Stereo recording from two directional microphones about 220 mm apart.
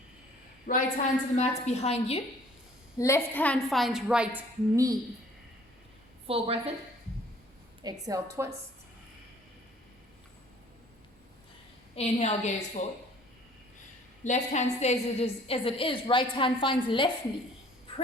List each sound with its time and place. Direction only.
0.7 s a woman's voice: 35° left (ahead or behind)
3.0 s a woman's voice: 10° left (ahead or behind)
4.4 s a woman's voice: 15° right (ahead or behind)
6.2 s a woman's voice: 25° right (ahead or behind)
8.0 s a woman's voice: 15° right (ahead or behind)
11.9 s a woman's voice: 30° left (ahead or behind)
14.3 s a woman's voice: 30° left (ahead or behind)